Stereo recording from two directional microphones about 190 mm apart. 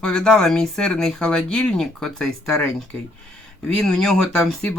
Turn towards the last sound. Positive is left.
turn(degrees=5)  # may be behind; listen again after turning